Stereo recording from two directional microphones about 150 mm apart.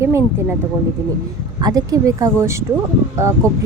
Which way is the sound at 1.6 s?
25° right (ahead or behind).